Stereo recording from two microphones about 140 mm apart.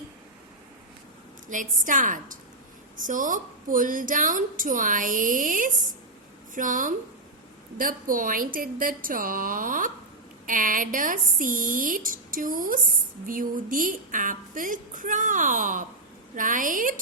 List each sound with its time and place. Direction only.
1.5 s a woman's voice: 65° right (ahead or behind)